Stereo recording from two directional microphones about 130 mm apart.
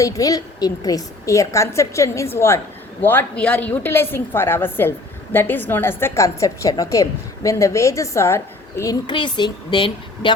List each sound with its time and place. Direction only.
0.0 s a woman's voice: 25° left (ahead or behind)